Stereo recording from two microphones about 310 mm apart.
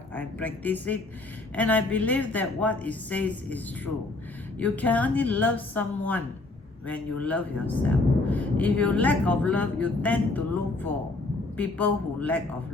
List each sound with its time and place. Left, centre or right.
0.1 s speech: centre
4.6 s speech: centre